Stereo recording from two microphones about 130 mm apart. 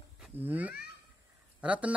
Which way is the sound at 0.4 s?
15° right (ahead or behind).